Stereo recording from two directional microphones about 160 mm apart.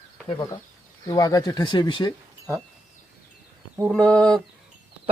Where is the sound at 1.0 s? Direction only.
25° left (ahead or behind).